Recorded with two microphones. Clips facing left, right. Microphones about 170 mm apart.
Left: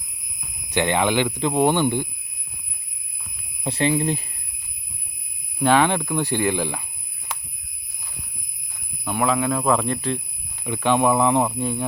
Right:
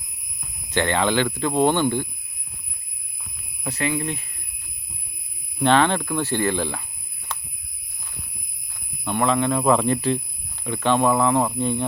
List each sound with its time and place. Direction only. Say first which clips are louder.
0.7 s speech: left 1 dB; 15° left (ahead or behind)
3.6 s speech: left 4 dB; 30° left (ahead or behind)
5.5 s speech: even; 10° left (ahead or behind)
9.0 s speech: right 1 dB; 5° left (ahead or behind)
10.6 s speech: even; 15° left (ahead or behind)